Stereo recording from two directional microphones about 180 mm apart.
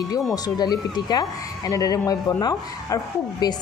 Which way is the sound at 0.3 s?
20° left (ahead or behind).